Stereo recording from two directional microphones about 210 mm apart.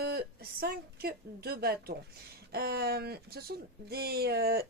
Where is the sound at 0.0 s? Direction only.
45° right (ahead or behind).